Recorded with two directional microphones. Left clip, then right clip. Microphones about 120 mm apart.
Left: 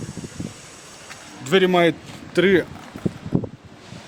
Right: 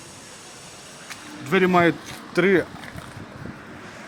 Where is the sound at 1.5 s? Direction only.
90° left.